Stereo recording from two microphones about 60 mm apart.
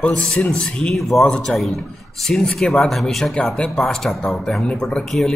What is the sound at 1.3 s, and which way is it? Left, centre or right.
A man's voice, centre.